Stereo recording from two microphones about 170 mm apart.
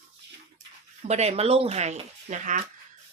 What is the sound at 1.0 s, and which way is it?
Speech, 40° right (ahead or behind).